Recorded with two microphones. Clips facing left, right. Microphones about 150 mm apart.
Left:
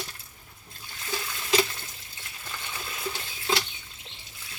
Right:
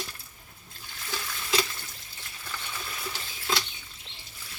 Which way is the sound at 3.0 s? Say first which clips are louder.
Left 3 dB; 20° left (ahead or behind).